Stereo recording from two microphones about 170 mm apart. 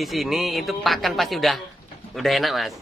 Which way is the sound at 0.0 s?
Centre (ahead or behind).